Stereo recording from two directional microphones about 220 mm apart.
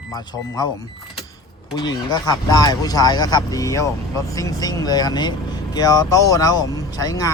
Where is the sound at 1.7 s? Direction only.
20° left (ahead or behind).